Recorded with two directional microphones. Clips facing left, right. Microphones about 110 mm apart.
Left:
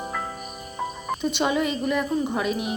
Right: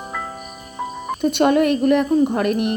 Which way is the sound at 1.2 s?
55° right (ahead or behind).